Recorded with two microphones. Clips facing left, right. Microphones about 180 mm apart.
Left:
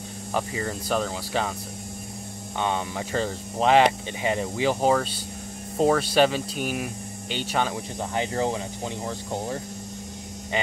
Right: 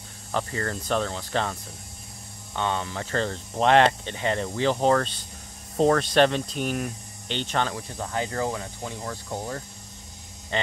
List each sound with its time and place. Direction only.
0.3 s speech: 10° left (ahead or behind)
2.5 s speech: 15° left (ahead or behind)
7.7 s speech: 20° left (ahead or behind)